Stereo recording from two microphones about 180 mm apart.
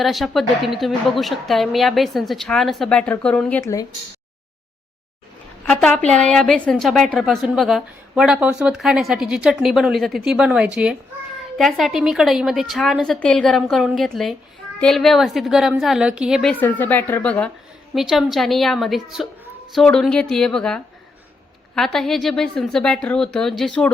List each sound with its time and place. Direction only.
0.0 s a woman's voice: centre (ahead or behind)
3.6 s speech: 20° left (ahead or behind)
5.6 s a woman's voice: 5° left (ahead or behind)
17.9 s a woman's voice: centre (ahead or behind)